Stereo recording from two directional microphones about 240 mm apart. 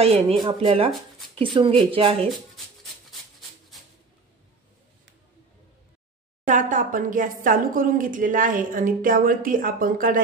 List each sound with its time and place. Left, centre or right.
0.0 s speech: right
3.1 s rub: centre
6.4 s a woman's voice: right